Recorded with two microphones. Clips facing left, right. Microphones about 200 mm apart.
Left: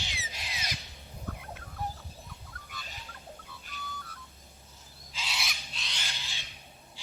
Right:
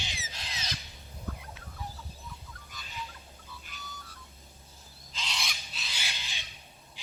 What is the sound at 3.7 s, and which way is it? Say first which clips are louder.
Music: left 8 dB; 55° left (ahead or behind).